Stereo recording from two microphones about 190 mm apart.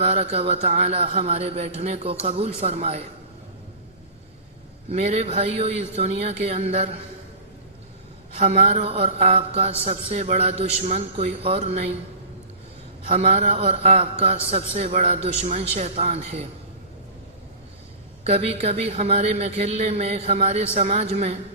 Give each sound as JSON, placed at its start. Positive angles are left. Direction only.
{"t": 0.0, "sound": "a man's voice", "side_deg": -35}
{"t": 4.9, "sound": "a man's voice", "side_deg": -35}
{"t": 8.4, "sound": "a man's voice", "side_deg": -35}
{"t": 13.1, "sound": "a man's voice", "side_deg": -35}
{"t": 18.2, "sound": "a man's voice", "side_deg": -35}